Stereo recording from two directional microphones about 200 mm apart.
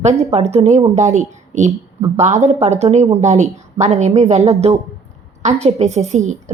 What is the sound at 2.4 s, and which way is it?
A woman's voice, 35° right (ahead or behind).